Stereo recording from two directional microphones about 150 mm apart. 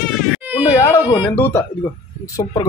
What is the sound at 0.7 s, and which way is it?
Speech, 20° left (ahead or behind).